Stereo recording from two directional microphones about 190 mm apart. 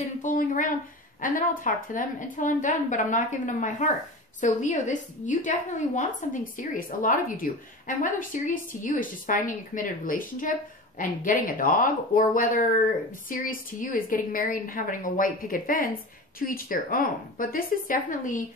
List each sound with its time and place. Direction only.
0.2 s a woman's voice: 45° left (ahead or behind)